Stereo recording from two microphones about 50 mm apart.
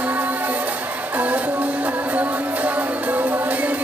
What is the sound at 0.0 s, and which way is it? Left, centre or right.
Music, right.